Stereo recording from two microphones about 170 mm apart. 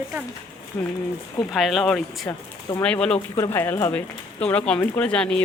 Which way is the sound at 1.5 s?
Centre (ahead or behind).